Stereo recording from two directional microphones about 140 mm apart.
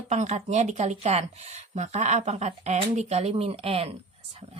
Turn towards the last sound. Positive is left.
turn(degrees=-45)  # may be behind; listen again after turning